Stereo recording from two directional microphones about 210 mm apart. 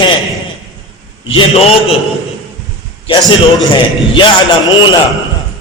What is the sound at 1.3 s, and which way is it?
Speech, 25° left (ahead or behind).